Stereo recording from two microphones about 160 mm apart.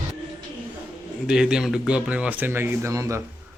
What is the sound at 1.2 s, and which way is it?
A man's voice, 5° right (ahead or behind).